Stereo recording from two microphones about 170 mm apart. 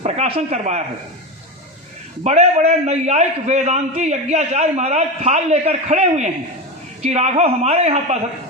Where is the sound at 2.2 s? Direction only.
40° right (ahead or behind).